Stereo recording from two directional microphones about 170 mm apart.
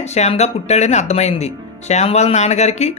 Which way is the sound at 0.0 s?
40° left (ahead or behind).